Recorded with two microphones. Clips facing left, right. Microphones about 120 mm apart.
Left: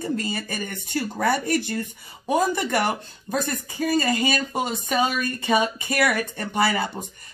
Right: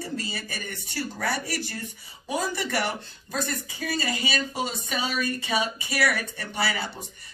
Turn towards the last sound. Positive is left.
turn(degrees=50)  # may be behind; listen again after turning